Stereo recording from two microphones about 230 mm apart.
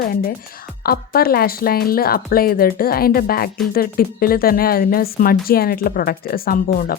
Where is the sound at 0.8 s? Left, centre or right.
Left.